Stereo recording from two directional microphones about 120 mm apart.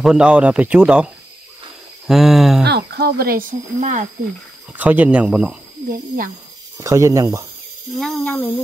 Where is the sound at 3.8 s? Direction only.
90° right.